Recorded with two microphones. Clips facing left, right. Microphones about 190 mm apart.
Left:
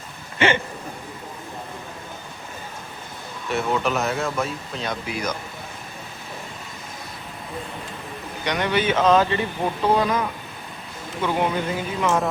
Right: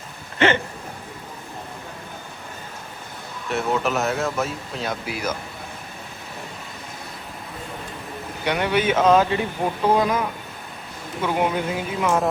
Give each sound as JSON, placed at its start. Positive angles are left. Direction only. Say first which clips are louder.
{"t": 0.3, "sound": "a sound", "louder": "right 1 dB", "side_deg": 15}
{"t": 3.5, "sound": "speech", "louder": "even", "side_deg": 0}
{"t": 8.4, "sound": "speech", "louder": "right 1 dB", "side_deg": -10}